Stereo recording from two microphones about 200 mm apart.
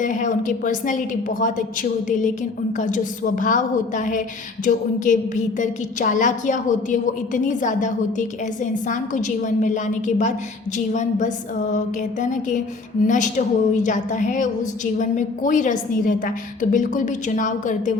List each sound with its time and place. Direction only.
0.0 s a woman's voice: 40° left (ahead or behind)
12.2 s a woman's voice: 40° left (ahead or behind)